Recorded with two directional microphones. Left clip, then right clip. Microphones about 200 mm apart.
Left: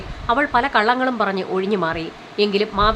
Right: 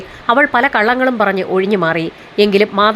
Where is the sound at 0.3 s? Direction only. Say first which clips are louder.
Right 6 dB; 20° right (ahead or behind).